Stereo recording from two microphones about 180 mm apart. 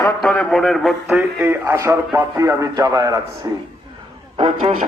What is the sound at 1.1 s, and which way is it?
Speech, 15° right (ahead or behind).